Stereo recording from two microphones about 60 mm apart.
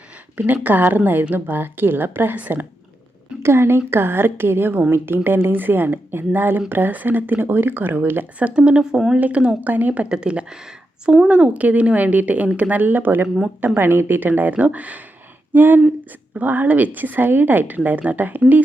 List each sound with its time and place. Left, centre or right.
0.3 s speech: right
3.4 s speech: right; by 9.1 s centre
9.1 s a woman's voice: right
12.8 s speech: right
13.2 s speech: centre
13.7 s a woman's voice: right